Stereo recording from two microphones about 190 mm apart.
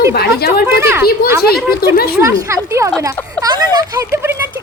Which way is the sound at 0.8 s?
10° right (ahead or behind).